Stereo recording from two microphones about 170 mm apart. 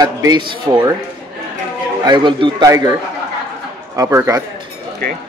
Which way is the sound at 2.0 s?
25° right (ahead or behind).